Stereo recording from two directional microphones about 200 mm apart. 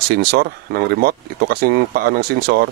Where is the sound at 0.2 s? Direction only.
50° right (ahead or behind).